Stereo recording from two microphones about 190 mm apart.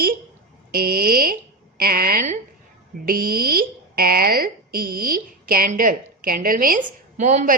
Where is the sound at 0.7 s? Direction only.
50° right (ahead or behind).